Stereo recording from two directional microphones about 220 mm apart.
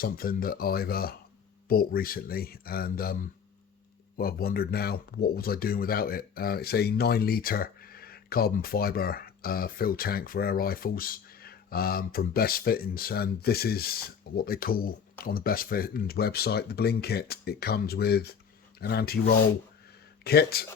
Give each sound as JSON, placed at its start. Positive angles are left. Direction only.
{"t": 0.0, "sound": "speech", "side_deg": 40}